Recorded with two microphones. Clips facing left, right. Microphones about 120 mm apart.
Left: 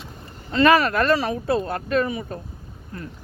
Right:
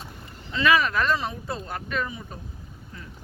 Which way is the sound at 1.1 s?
75° left (ahead or behind).